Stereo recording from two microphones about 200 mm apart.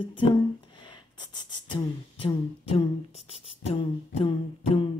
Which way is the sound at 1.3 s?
20° left (ahead or behind).